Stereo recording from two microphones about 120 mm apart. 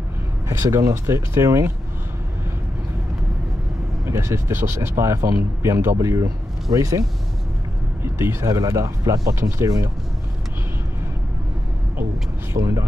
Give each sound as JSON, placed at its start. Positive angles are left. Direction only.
{"t": 0.5, "sound": "speech", "side_deg": -25}
{"t": 4.0, "sound": "speech", "side_deg": -25}
{"t": 12.5, "sound": "speech", "side_deg": -25}